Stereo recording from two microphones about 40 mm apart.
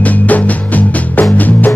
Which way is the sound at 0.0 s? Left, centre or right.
Left.